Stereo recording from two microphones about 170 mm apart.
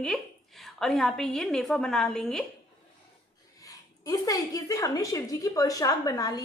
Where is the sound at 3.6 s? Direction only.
20° left (ahead or behind).